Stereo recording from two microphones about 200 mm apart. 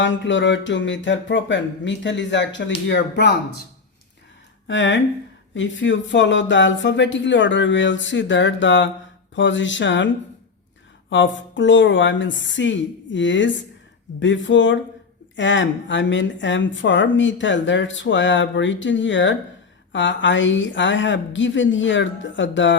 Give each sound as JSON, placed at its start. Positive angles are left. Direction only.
{"t": 0.0, "sound": "speech", "side_deg": 65}
{"t": 4.7, "sound": "speech", "side_deg": 70}
{"t": 11.1, "sound": "speech", "side_deg": 65}